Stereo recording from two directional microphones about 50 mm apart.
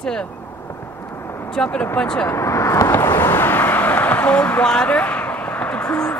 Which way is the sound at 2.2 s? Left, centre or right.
Left.